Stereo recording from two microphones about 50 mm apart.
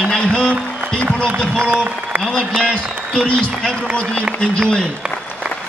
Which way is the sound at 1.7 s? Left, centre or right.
Right.